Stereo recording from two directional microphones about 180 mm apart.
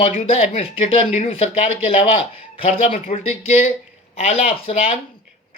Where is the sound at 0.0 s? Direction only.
35° left (ahead or behind).